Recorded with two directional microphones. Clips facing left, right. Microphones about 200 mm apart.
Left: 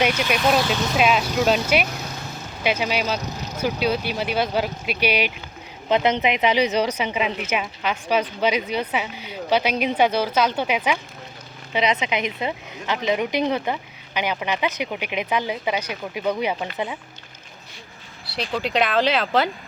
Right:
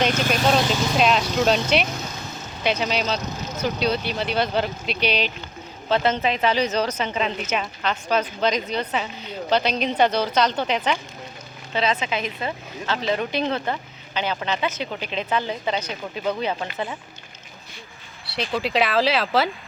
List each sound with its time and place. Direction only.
0.1 s speech: 45° right (ahead or behind)
0.5 s a woman's voice: 5° left (ahead or behind)
18.3 s speech: centre (ahead or behind)